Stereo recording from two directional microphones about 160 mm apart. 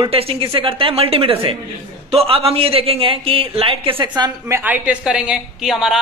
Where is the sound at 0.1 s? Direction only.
35° right (ahead or behind).